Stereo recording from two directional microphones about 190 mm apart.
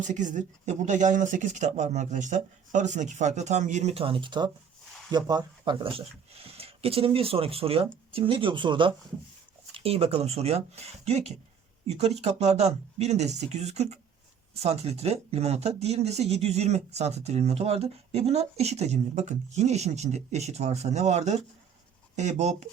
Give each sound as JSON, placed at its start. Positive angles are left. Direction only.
{"t": 0.0, "sound": "speech", "side_deg": -40}